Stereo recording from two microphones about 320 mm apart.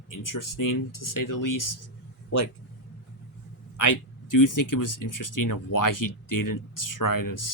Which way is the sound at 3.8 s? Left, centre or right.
Left.